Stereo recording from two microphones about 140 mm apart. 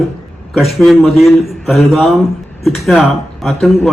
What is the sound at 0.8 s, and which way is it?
A man's voice, centre (ahead or behind).